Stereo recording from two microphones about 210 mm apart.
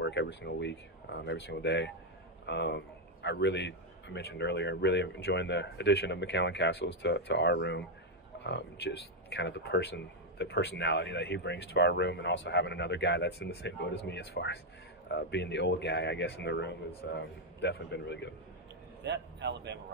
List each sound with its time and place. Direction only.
0.0 s a man's voice: 55° left (ahead or behind)
19.0 s a man's voice: 55° right (ahead or behind)